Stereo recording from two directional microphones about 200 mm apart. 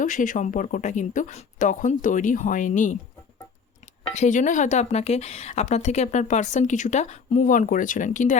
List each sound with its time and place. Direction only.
0.0 s a woman's voice: 40° left (ahead or behind)
4.1 s a woman's voice: 35° left (ahead or behind)